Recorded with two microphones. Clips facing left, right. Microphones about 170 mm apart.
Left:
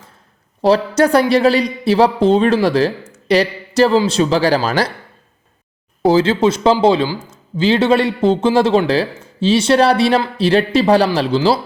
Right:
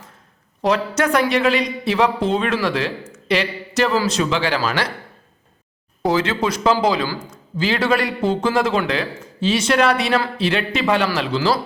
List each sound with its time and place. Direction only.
0.6 s speech: 35° left (ahead or behind)
6.0 s a man's voice: 30° left (ahead or behind)